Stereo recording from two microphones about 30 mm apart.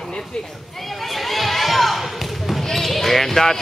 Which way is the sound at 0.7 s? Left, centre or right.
Centre.